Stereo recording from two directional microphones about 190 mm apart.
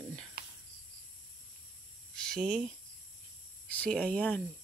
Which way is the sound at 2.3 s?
Centre (ahead or behind).